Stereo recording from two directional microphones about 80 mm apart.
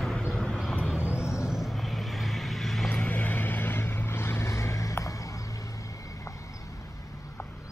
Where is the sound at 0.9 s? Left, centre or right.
Centre.